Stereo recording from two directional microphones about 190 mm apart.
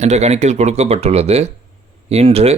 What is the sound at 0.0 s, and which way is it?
Speech, 35° right (ahead or behind).